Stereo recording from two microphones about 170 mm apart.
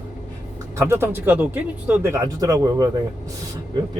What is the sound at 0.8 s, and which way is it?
Speech, 15° right (ahead or behind).